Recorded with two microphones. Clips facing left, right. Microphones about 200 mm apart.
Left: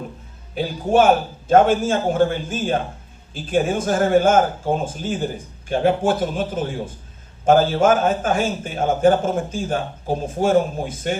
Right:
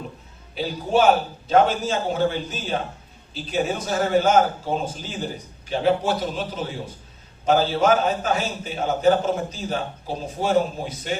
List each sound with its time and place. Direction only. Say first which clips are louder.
0.5 s a man's voice: left 4 dB; 50° left (ahead or behind)